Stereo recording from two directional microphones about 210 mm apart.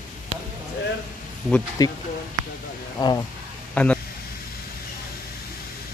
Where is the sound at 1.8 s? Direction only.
20° left (ahead or behind).